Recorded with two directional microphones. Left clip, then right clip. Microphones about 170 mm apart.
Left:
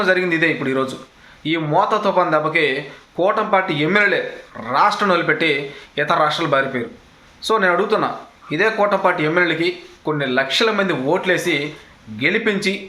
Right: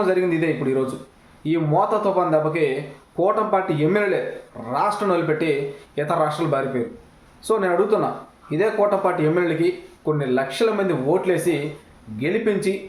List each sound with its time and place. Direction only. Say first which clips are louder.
0.0 s speech: left 4 dB; 5° right (ahead or behind)